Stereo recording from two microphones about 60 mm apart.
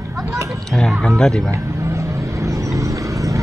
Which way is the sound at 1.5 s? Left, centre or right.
Right.